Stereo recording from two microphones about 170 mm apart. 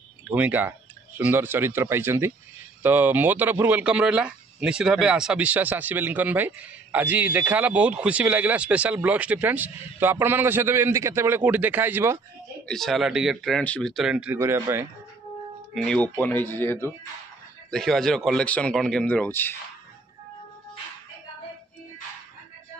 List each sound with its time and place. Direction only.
0.3 s speech: 10° right (ahead or behind)
12.6 s speech: centre (ahead or behind); by 14.9 s 15° right (ahead or behind)
15.7 s speech: 5° left (ahead or behind)
17.6 s speech: centre (ahead or behind)